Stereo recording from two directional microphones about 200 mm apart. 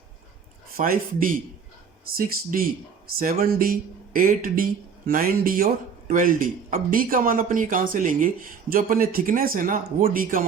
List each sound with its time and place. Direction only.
0.7 s speech: 45° right (ahead or behind)